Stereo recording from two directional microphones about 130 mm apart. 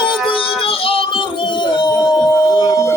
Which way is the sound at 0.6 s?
45° left (ahead or behind).